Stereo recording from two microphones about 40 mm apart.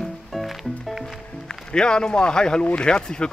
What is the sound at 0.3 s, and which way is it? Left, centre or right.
Music, centre.